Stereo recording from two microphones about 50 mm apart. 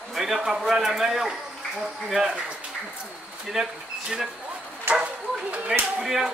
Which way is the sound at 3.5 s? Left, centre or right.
Centre.